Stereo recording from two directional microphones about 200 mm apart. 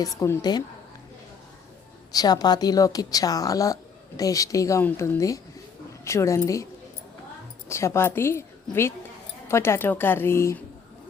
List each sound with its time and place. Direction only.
0.0 s a woman's voice: 15° left (ahead or behind)
2.1 s a woman's voice: 20° left (ahead or behind)
7.7 s a woman's voice: 15° left (ahead or behind)